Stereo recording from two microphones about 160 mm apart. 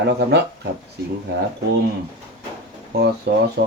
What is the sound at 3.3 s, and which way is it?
Speech, 75° right (ahead or behind).